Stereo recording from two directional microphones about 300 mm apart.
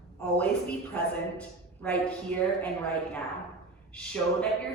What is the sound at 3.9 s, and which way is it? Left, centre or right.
Speech, centre.